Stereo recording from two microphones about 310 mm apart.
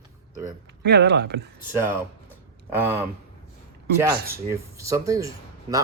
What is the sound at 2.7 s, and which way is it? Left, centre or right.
Speech, centre.